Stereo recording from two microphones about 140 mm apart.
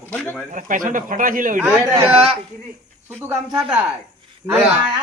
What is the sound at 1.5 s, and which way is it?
Speech, 25° right (ahead or behind).